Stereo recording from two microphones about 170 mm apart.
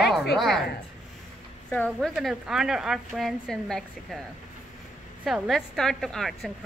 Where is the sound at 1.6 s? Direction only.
5° left (ahead or behind).